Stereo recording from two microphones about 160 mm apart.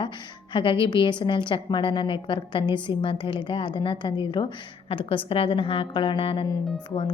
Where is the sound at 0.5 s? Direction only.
35° left (ahead or behind).